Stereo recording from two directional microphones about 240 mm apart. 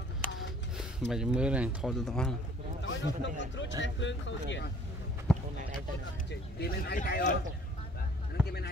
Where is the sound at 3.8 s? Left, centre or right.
Left.